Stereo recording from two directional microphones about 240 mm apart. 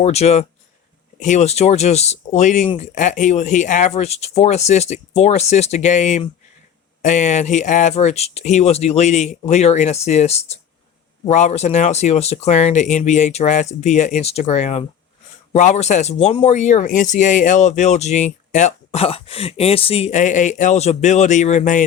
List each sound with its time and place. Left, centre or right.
0.0 s speech: left